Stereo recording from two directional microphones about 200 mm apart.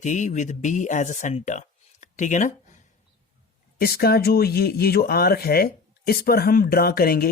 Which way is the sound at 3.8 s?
50° left (ahead or behind).